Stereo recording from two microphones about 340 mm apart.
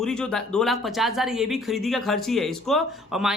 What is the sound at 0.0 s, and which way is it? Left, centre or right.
Speech, centre.